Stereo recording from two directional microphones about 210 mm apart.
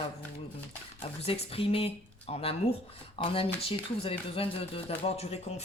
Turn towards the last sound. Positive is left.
turn(degrees=30)  # may be behind; listen again after turning